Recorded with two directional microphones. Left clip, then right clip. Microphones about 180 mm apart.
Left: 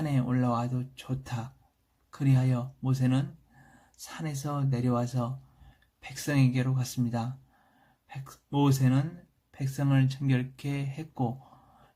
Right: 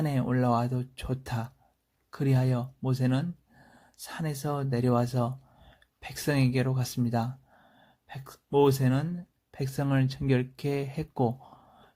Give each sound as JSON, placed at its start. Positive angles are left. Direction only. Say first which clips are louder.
{"t": 0.0, "sound": "speech", "louder": "right 2 dB", "side_deg": -40}